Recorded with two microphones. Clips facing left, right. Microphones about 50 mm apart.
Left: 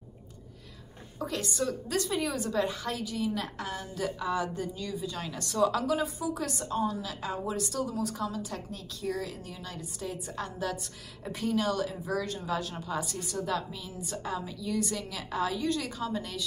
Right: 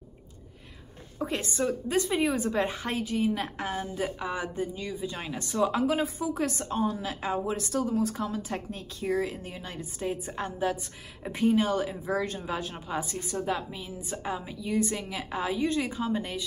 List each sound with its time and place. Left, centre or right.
1.2 s a woman's voice: right